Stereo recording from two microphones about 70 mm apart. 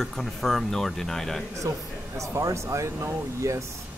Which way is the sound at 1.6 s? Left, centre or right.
Right.